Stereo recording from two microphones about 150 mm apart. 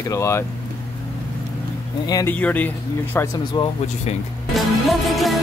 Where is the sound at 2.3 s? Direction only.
10° left (ahead or behind).